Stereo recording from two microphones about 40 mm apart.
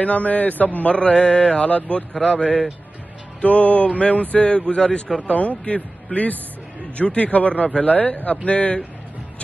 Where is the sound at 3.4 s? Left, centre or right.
Left.